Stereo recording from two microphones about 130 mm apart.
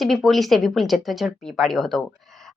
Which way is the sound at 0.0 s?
Centre (ahead or behind).